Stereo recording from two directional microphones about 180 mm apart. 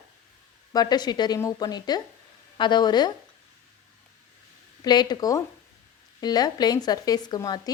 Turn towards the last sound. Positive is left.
turn(degrees=20)  # may be behind; listen again after turning